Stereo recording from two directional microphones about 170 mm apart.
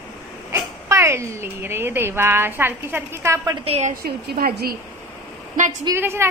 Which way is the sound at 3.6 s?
40° right (ahead or behind).